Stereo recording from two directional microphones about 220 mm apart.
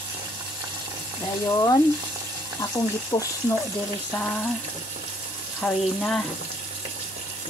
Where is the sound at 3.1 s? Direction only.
15° left (ahead or behind).